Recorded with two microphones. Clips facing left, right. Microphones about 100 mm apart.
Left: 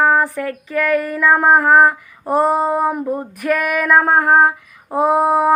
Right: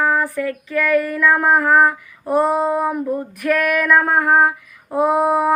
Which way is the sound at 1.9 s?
50° left (ahead or behind).